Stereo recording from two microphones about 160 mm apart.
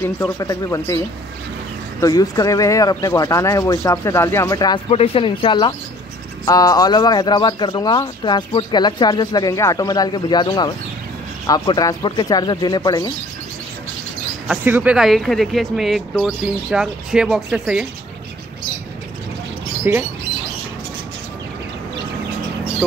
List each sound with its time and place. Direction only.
0.0 s a man's voice: 15° left (ahead or behind)
14.5 s speech: 10° right (ahead or behind)
19.8 s speech: 15° right (ahead or behind)